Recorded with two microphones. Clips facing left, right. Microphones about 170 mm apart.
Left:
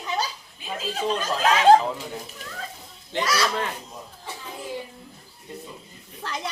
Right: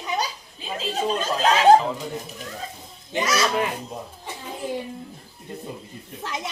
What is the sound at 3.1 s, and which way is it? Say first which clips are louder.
Speech: right 2 dB; 20° right (ahead or behind).